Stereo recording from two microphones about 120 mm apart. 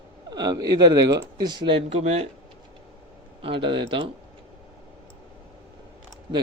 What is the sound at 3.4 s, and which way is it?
Speech, 45° right (ahead or behind).